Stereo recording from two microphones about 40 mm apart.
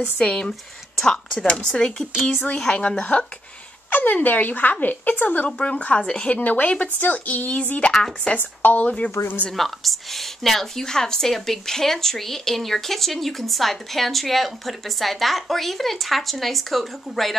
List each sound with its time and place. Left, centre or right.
0.2 s speech: left
0.5 s speech: centre; by 3.3 s left
3.9 s a woman's voice: left
5.6 s speech: left
6.3 s speech: left
7.9 s speech: centre
8.4 s a woman's voice: left
9.5 s a woman's voice: centre